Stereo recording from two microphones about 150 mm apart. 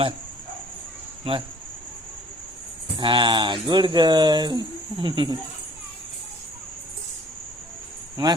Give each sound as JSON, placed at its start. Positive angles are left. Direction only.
{"t": 1.3, "sound": "speech", "side_deg": -40}
{"t": 3.0, "sound": "speech", "side_deg": -35}
{"t": 8.1, "sound": "speech", "side_deg": -25}